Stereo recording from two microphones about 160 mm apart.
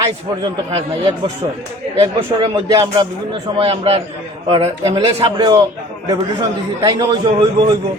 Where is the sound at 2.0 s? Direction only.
30° right (ahead or behind).